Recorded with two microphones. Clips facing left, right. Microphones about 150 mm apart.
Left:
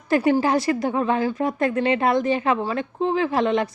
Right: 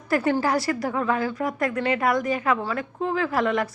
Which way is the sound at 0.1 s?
20° left (ahead or behind).